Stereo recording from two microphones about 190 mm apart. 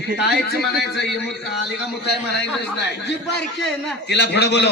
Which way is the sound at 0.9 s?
65° left (ahead or behind).